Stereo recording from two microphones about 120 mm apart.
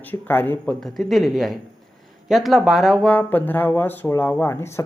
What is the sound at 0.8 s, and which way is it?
Speech, centre (ahead or behind).